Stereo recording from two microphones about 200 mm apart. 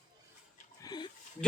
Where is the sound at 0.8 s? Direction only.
20° left (ahead or behind).